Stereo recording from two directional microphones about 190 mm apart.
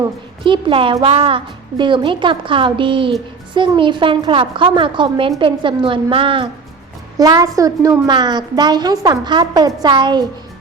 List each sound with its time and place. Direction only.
0.4 s a woman's voice: 25° right (ahead or behind)